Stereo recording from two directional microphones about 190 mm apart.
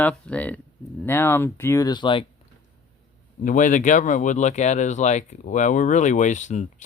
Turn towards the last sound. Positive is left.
turn(degrees=40)  # may be behind; listen again after turning